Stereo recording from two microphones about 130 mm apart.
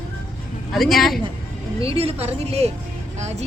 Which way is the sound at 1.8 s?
50° right (ahead or behind).